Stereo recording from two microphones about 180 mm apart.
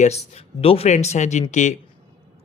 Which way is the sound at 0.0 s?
35° left (ahead or behind).